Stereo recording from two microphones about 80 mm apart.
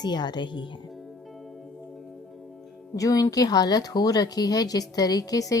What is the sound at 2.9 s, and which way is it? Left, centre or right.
Speech, left.